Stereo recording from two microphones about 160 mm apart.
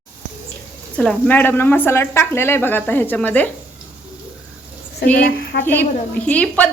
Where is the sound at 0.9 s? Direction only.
5° left (ahead or behind).